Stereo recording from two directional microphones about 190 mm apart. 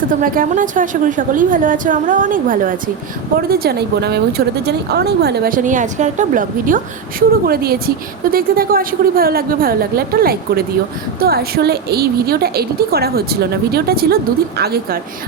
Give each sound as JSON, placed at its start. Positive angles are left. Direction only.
{"t": 0.2, "sound": "a woman's voice", "side_deg": -45}